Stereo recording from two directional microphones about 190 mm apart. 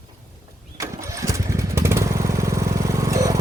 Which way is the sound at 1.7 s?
15° right (ahead or behind).